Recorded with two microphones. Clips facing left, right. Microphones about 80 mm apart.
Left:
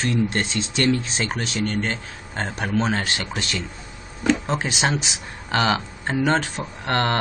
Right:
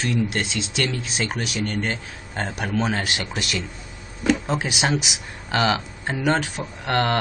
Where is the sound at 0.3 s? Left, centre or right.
Left.